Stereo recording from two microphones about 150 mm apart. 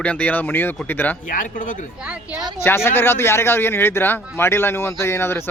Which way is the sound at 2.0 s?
5° right (ahead or behind).